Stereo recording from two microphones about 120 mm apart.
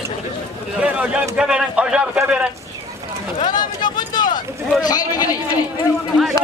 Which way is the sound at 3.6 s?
35° left (ahead or behind).